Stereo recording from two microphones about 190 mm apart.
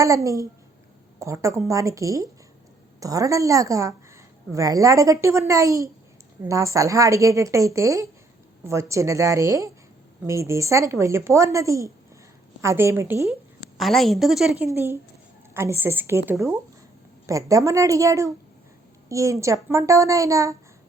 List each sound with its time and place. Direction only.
0.0 s a woman's voice: 15° right (ahead or behind)
13.7 s a woman's voice: centre (ahead or behind)
14.7 s a woman's voice: 15° right (ahead or behind)
17.2 s a woman's voice: 15° right (ahead or behind)